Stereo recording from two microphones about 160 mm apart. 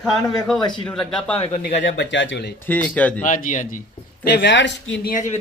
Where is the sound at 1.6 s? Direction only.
90° left.